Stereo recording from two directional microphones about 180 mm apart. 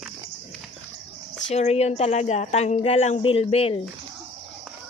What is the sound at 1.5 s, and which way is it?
Speech, 35° left (ahead or behind).